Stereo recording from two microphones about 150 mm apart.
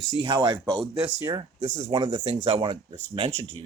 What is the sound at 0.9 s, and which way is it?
Speech, 10° right (ahead or behind).